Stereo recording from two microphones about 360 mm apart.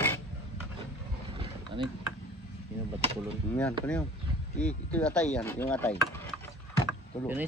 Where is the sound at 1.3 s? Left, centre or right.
Centre.